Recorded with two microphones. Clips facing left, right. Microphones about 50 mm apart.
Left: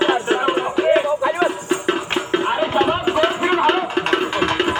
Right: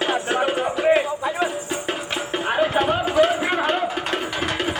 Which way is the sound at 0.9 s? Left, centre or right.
Left.